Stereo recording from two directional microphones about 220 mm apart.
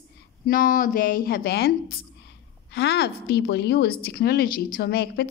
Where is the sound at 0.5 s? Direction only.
40° left (ahead or behind).